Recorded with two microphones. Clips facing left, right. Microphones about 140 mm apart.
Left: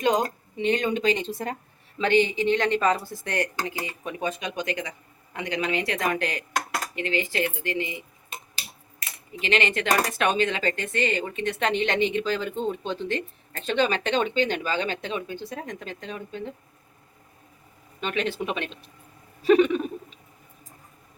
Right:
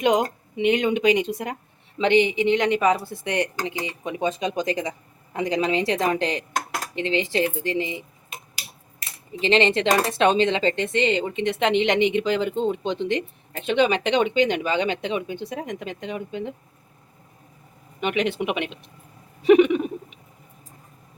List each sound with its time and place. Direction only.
0.0 s speech: 20° right (ahead or behind)
4.3 s speech: 30° right (ahead or behind)
9.3 s speech: 30° right (ahead or behind)
18.0 s speech: 15° right (ahead or behind)
19.4 s a sound: 15° right (ahead or behind)